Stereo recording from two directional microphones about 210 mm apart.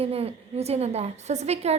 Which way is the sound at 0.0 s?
30° right (ahead or behind).